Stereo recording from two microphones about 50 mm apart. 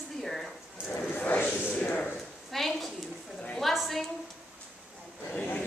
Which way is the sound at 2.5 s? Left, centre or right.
Centre.